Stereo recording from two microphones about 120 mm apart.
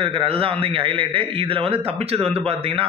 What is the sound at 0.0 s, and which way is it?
A man's voice, 50° right (ahead or behind).